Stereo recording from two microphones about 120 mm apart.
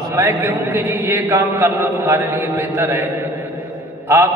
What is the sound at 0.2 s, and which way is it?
A man's voice, 20° right (ahead or behind).